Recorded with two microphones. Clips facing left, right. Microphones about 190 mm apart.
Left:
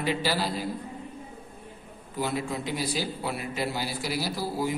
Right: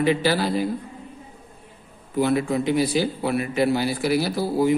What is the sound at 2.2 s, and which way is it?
A man's voice, 65° right (ahead or behind).